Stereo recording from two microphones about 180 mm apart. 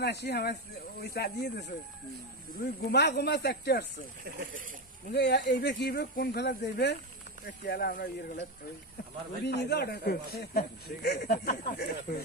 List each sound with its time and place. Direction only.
0.0 s speech: 65° left (ahead or behind)
2.9 s speech: 65° left (ahead or behind)
5.1 s speech: 70° left (ahead or behind)